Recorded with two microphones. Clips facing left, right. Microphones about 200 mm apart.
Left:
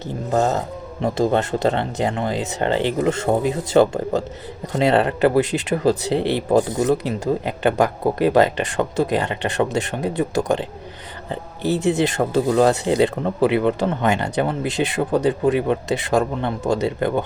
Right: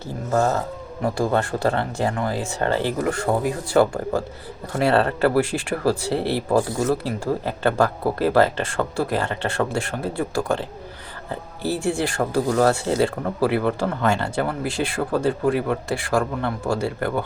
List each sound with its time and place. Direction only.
0.0 s speech: 20° left (ahead or behind)